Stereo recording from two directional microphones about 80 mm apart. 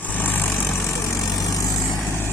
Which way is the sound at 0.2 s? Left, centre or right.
Left.